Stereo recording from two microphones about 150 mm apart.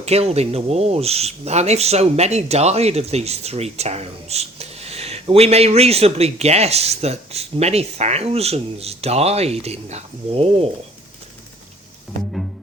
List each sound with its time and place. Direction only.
0.0 s speech: 45° right (ahead or behind)